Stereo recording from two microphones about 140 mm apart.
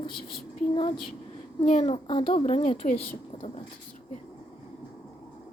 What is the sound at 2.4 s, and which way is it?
Speech, 55° left (ahead or behind).